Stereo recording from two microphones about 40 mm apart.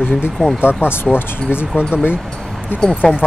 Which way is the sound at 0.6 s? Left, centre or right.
Left.